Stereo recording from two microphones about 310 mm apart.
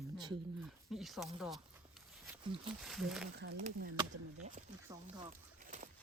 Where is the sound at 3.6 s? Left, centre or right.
Right.